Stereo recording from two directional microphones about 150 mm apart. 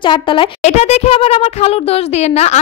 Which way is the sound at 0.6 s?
45° left (ahead or behind).